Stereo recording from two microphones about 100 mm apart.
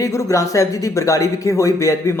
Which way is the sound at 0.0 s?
35° left (ahead or behind).